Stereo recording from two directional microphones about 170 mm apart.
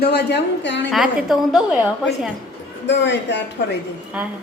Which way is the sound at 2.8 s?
90° left.